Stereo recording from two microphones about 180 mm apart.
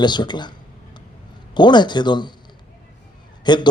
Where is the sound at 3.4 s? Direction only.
25° left (ahead or behind).